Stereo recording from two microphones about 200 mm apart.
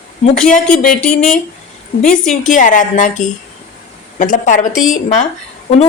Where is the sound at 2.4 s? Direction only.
40° left (ahead or behind).